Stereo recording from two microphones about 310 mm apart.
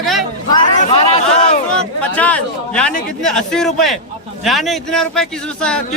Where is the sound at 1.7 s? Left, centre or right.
Centre.